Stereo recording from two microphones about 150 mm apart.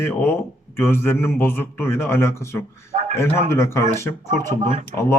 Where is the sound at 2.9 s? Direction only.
50° right (ahead or behind).